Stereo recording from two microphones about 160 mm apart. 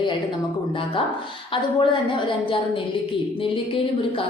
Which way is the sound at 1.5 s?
30° left (ahead or behind).